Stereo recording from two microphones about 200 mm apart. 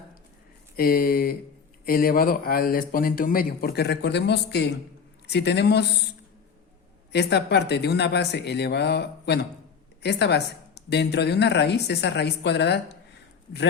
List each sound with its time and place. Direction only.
0.8 s a woman's voice: 45° left (ahead or behind)
7.1 s a woman's voice: 55° left (ahead or behind)